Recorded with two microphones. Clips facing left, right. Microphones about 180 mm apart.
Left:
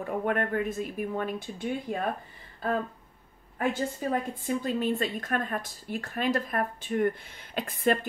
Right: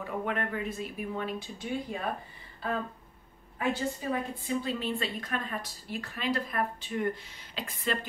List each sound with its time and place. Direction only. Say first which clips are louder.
0.0 s a woman's voice: left 4 dB; 50° left (ahead or behind)